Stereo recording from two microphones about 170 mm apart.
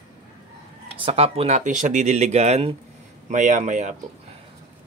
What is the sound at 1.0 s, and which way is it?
Speech, 35° right (ahead or behind).